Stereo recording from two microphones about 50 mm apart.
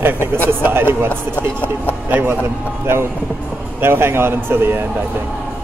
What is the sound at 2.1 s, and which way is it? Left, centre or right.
Speech, right.